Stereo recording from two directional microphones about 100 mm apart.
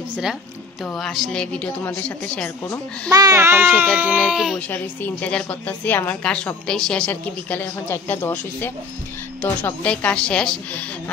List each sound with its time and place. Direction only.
0.8 s a woman's voice: 5° left (ahead or behind)
3.1 s speech: 40° right (ahead or behind)
3.3 s speech: 25° right (ahead or behind)
4.2 s speech: 5° right (ahead or behind)
4.6 s a woman's voice: 15° left (ahead or behind)